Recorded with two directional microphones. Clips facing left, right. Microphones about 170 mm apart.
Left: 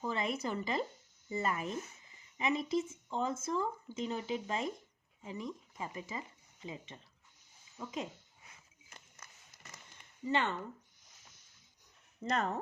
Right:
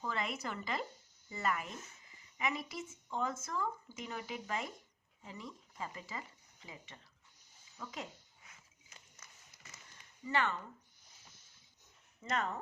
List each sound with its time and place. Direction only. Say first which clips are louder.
0.0 s speech: left 4 dB; 20° left (ahead or behind)
10.2 s speech: left 2 dB; 25° left (ahead or behind)
12.2 s speech: left 3 dB; 35° left (ahead or behind)